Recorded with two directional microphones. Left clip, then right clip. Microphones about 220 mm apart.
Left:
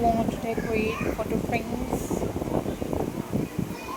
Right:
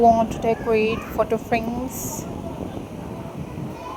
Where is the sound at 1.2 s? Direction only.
30° right (ahead or behind).